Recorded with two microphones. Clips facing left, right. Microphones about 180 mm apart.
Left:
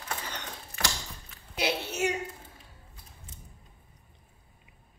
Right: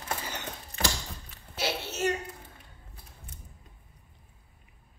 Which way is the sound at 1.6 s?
15° left (ahead or behind).